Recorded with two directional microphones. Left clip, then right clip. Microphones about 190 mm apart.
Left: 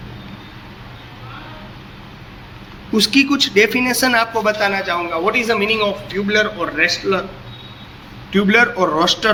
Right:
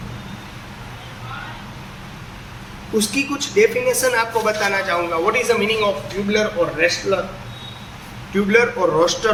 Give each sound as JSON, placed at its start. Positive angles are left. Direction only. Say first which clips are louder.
{"t": 3.0, "sound": "a man's voice", "louder": "left 9 dB", "side_deg": 50}
{"t": 8.3, "sound": "a man's voice", "louder": "left 2 dB", "side_deg": 50}